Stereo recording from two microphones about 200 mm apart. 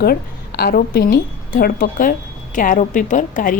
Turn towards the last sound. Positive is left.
turn(degrees=40)  # may be behind; listen again after turning